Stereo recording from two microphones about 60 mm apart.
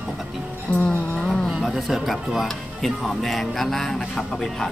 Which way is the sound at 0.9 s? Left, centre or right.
Centre.